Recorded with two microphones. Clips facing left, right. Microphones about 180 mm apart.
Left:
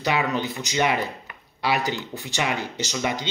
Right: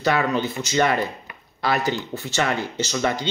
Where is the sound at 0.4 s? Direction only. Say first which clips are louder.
Right 3 dB; 15° left (ahead or behind).